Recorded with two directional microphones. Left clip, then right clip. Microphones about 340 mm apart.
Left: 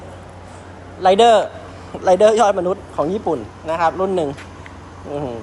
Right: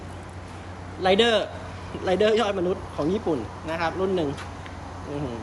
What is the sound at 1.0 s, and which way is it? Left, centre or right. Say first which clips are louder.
A man's voice: left 9 dB; left.